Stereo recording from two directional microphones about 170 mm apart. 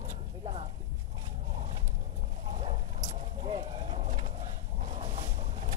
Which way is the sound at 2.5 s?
35° right (ahead or behind).